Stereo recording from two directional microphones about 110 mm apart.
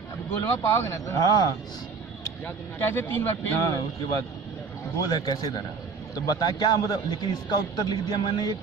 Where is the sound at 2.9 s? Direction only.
20° left (ahead or behind).